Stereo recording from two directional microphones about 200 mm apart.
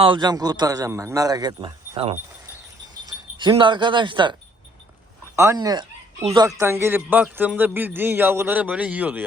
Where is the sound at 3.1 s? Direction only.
25° right (ahead or behind).